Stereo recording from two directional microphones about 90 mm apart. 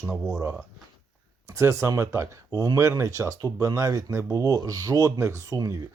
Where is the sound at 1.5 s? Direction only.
30° right (ahead or behind).